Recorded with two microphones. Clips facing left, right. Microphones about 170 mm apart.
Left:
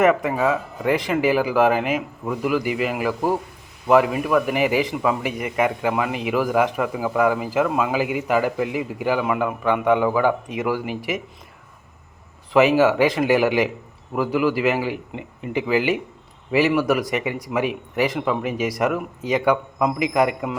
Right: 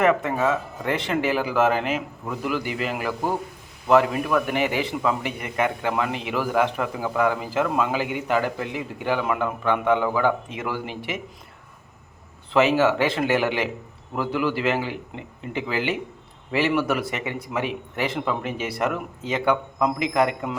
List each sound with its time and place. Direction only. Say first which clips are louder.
0.0 s a man's voice: left 3 dB; 15° left (ahead or behind)
12.5 s a man's voice: left 3 dB; 10° left (ahead or behind)